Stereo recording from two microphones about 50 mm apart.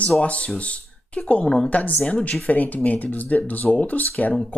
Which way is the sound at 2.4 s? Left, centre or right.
Left.